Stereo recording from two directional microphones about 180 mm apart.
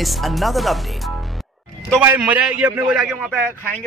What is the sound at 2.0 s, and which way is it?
A man's voice, 10° right (ahead or behind).